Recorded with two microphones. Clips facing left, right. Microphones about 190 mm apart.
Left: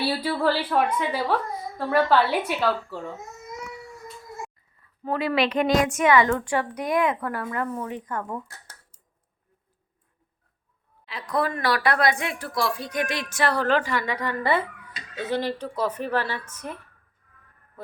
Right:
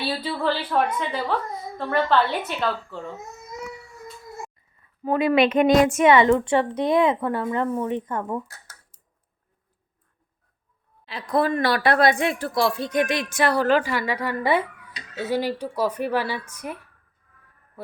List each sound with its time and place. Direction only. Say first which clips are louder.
0.0 s a woman's voice: left 2 dB; 10° left (ahead or behind)
5.0 s speech: right 5 dB; 20° right (ahead or behind)
11.0 s speech: right 4 dB; 30° right (ahead or behind); by 16.9 s 10° right (ahead or behind)